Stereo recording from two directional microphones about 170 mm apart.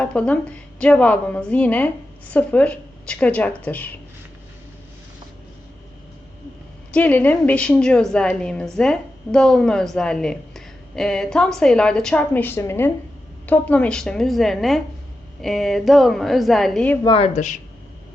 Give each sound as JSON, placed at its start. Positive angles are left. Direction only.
{"t": 0.0, "sound": "a woman's voice", "side_deg": 5}
{"t": 6.9, "sound": "a woman's voice", "side_deg": 10}
{"t": 17.0, "sound": "speech", "side_deg": 30}